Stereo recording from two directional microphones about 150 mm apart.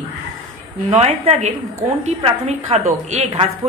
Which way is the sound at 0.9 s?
50° right (ahead or behind).